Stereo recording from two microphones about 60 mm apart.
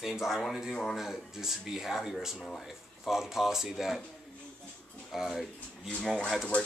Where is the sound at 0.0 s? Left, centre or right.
Centre.